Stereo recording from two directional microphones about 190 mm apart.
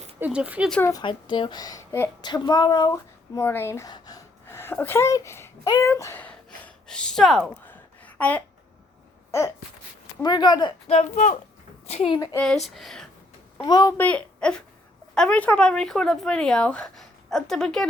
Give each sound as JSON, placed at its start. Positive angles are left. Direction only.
{"t": 0.2, "sound": "speech", "side_deg": -5}
{"t": 0.7, "sound": "a woman's voice", "side_deg": 15}
{"t": 10.2, "sound": "speech", "side_deg": 20}
{"t": 10.9, "sound": "speech", "side_deg": 40}
{"t": 12.4, "sound": "speech", "side_deg": 0}
{"t": 13.6, "sound": "a woman's voice", "side_deg": 20}